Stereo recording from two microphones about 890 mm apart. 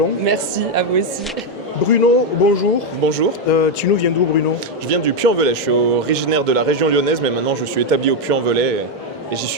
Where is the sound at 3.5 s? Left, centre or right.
Left.